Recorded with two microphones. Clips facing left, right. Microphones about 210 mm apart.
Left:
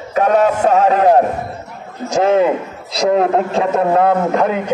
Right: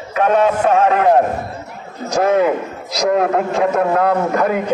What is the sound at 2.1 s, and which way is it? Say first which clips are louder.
A man's voice: left 1 dB; 25° left (ahead or behind).